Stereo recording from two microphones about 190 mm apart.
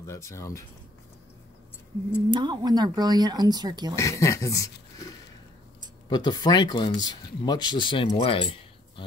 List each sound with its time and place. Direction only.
0.0 s speech: 15° left (ahead or behind)
2.3 s speech: 25° right (ahead or behind)
3.9 s speech: 15° left (ahead or behind)